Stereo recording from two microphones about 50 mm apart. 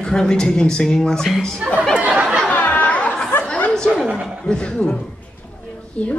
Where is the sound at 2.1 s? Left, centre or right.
Centre.